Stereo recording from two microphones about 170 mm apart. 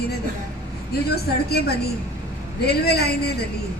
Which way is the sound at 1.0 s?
70° left (ahead or behind).